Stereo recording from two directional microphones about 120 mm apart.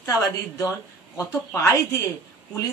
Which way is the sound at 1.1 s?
25° left (ahead or behind).